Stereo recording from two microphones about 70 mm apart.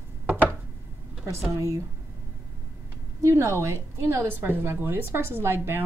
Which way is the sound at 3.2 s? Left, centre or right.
Right.